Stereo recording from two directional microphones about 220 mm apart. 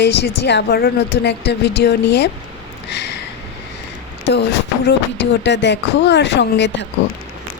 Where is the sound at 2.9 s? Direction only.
50° left (ahead or behind).